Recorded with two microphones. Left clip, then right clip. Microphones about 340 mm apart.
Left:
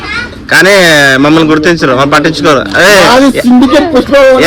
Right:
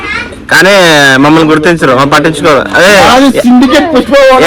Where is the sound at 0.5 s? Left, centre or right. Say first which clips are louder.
Even; right.